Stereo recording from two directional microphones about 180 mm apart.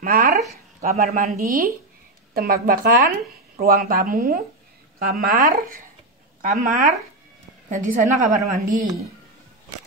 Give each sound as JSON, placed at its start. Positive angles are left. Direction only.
{"t": 0.0, "sound": "speech", "side_deg": -50}